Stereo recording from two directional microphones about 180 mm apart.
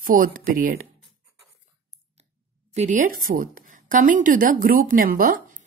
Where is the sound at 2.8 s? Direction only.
45° right (ahead or behind).